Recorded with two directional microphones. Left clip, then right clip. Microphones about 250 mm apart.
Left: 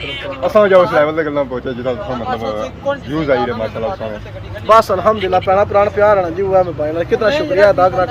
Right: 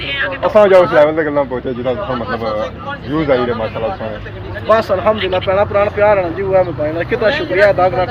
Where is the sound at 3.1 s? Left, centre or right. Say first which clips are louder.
Right 3 dB; centre.